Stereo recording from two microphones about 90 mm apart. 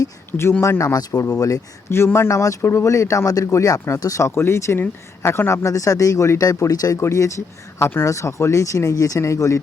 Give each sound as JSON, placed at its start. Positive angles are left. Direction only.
{"t": 0.3, "sound": "speech", "side_deg": 30}
{"t": 1.9, "sound": "speech", "side_deg": 30}